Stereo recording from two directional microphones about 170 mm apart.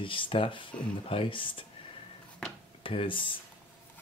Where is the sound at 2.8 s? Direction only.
30° left (ahead or behind).